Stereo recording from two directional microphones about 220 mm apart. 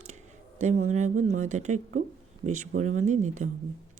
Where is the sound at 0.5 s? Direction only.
35° right (ahead or behind).